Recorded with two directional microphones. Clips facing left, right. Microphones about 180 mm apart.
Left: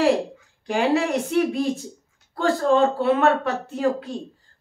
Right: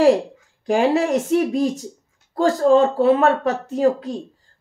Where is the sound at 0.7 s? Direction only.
45° right (ahead or behind).